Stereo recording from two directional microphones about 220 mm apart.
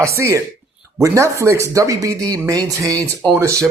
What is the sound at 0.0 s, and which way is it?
Speech, 15° right (ahead or behind).